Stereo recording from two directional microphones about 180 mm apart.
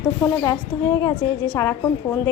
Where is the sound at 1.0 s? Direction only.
20° left (ahead or behind).